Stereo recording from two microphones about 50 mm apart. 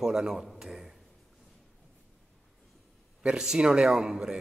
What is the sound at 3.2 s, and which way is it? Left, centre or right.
A man's voice, centre.